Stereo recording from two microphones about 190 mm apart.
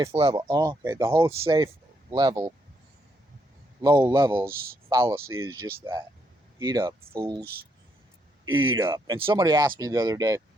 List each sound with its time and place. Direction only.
0.1 s speech: 30° right (ahead or behind)
0.4 s speech: 20° right (ahead or behind)
3.8 s speech: 10° right (ahead or behind)
8.4 s speech: 90° right
8.8 s speech: 15° right (ahead or behind)